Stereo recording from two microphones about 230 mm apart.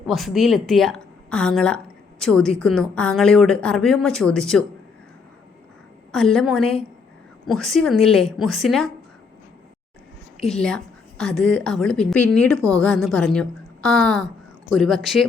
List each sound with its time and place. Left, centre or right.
0.1 s a woman's voice: centre
6.1 s a woman's voice: centre
10.5 s a woman's voice: centre